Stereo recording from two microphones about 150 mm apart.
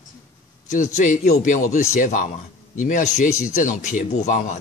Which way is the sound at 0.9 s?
55° left (ahead or behind).